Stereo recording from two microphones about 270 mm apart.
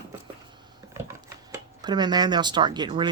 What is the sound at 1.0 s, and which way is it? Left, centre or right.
Speech, centre.